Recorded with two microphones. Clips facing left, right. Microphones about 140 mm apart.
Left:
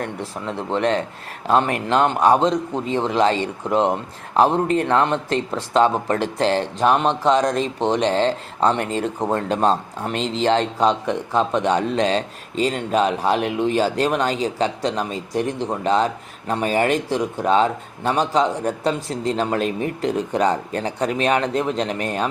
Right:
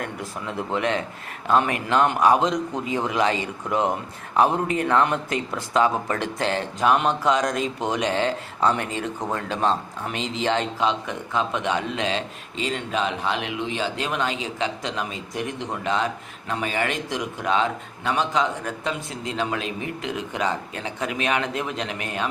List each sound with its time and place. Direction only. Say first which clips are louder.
0.2 s speech: left 3 dB; 30° left (ahead or behind)
0.7 s speech: left 5 dB; 5° right (ahead or behind)
1.9 s speech: left 2 dB; 30° left (ahead or behind)
6.4 s speech: left 6 dB; centre (ahead or behind)
6.7 s speech: right 1 dB; 30° left (ahead or behind)
8.7 s speech: left 5 dB; 5° right (ahead or behind)
9.0 s speech: left 6 dB; 35° left (ahead or behind)
10.1 s speech: left 5 dB; 5° right (ahead or behind)
10.8 s speech: left 5 dB; 35° left (ahead or behind)